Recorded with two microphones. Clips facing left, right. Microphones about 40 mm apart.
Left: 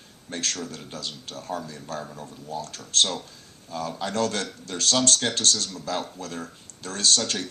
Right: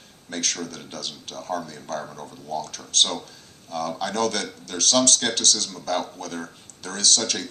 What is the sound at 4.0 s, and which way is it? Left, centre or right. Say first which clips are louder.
Speech: even; right.